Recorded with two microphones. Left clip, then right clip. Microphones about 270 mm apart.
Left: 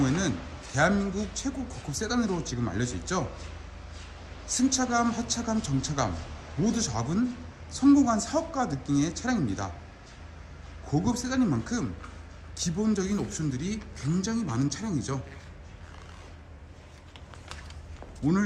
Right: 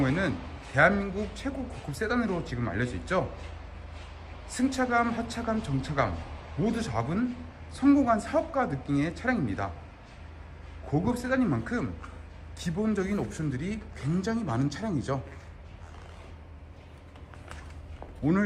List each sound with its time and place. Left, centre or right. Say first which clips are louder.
0.0 s speech: even; centre
4.5 s speech: even; centre
10.8 s speech: right 1 dB; centre
18.3 s speech: right 1 dB; centre